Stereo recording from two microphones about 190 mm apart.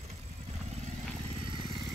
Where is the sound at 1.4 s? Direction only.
25° right (ahead or behind).